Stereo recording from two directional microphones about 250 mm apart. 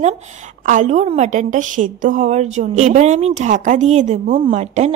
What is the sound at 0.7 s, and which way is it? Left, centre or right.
A woman's voice, right.